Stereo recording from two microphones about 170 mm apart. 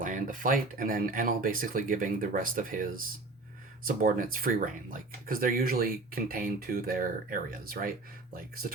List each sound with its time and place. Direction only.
0.0 s speech: 50° right (ahead or behind)